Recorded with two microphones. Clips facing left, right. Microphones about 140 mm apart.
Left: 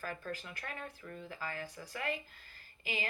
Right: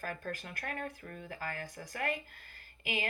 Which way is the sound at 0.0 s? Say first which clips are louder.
Right 2 dB; 50° right (ahead or behind).